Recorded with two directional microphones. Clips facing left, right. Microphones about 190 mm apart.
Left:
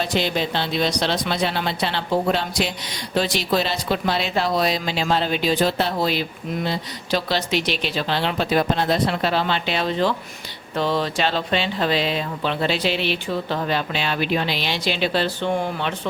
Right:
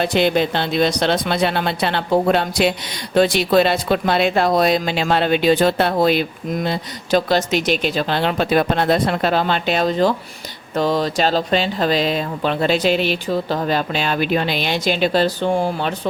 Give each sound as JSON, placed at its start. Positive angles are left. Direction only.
{"t": 0.0, "sound": "speech", "side_deg": -55}